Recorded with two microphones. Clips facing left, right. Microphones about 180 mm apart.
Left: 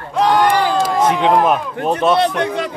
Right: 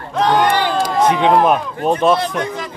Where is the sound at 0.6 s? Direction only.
Centre (ahead or behind).